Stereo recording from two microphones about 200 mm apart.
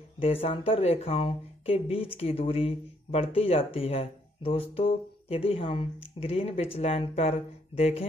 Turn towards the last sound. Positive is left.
turn(degrees=30)  # may be behind; listen again after turning